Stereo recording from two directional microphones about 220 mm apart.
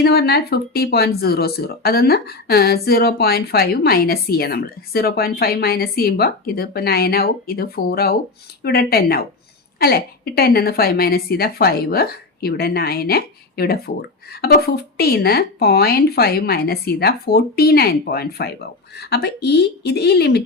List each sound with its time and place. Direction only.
0.0 s speech: 45° left (ahead or behind)